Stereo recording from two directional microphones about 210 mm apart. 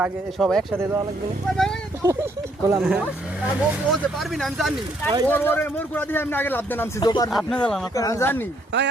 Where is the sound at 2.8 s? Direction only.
5° right (ahead or behind).